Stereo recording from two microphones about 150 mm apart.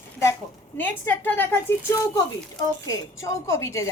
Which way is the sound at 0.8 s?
15° left (ahead or behind).